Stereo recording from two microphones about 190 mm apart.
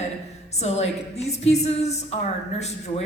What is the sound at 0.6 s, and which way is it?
Speech, 35° left (ahead or behind).